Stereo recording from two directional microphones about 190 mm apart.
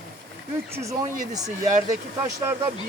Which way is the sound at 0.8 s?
15° right (ahead or behind).